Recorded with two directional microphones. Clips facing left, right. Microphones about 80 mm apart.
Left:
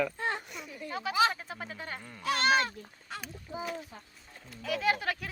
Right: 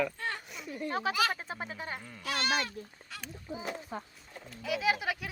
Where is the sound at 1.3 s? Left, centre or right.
Right.